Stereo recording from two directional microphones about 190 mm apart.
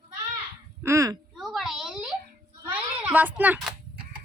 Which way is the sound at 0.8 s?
15° right (ahead or behind).